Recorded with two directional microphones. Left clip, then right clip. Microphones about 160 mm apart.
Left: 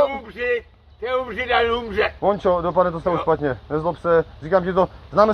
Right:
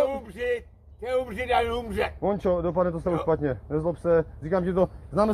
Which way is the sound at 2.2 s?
20° left (ahead or behind).